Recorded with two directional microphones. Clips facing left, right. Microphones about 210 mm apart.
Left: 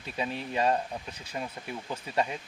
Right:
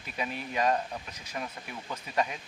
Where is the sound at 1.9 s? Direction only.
30° left (ahead or behind).